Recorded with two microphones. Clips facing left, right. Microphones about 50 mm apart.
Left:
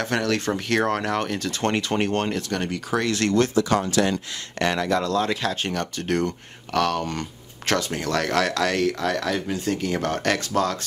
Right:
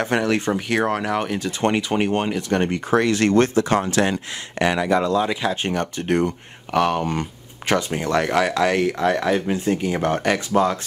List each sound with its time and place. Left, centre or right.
0.0 s speech: right
0.5 s speech: centre
2.5 s speech: right
4.6 s speech: centre